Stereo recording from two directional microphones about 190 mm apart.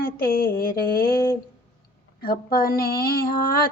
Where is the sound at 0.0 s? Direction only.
50° left (ahead or behind).